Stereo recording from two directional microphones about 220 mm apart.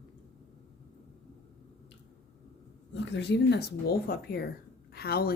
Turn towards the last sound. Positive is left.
turn(degrees=45)  # may be behind; listen again after turning